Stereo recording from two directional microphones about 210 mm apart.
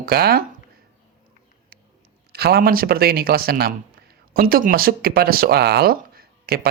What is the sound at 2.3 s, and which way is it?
Speech, 50° right (ahead or behind).